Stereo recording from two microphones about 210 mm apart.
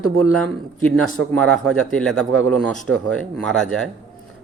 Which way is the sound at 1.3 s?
5° left (ahead or behind).